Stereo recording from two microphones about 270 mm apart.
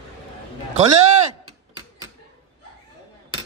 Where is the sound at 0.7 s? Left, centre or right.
Right.